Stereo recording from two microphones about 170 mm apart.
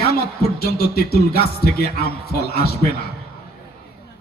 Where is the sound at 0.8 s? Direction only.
65° left (ahead or behind).